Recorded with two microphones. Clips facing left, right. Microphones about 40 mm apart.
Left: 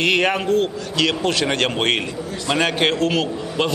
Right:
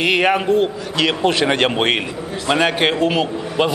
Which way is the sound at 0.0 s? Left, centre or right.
Centre.